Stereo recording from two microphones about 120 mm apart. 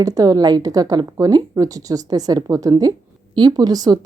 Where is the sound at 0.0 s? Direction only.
30° right (ahead or behind).